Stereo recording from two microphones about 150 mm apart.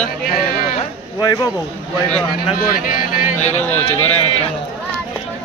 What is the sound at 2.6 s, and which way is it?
Speech, 70° left (ahead or behind).